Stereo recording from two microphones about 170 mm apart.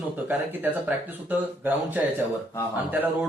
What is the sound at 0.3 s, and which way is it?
Speech, 10° right (ahead or behind).